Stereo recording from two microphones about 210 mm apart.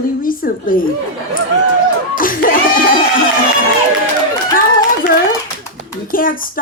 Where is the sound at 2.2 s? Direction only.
40° left (ahead or behind).